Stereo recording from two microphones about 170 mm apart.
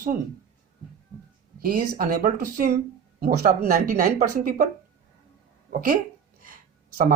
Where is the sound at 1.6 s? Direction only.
60° right (ahead or behind).